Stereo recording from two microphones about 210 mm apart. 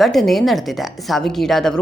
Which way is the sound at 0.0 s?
Centre (ahead or behind).